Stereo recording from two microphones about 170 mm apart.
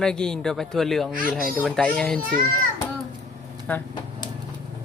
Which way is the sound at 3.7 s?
10° left (ahead or behind).